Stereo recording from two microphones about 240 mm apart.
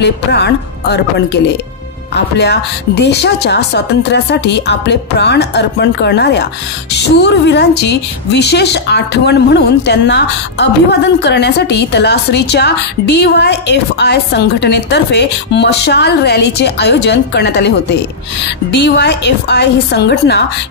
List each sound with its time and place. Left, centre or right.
0.0 s a woman's voice: left
18.8 s a woman's voice: left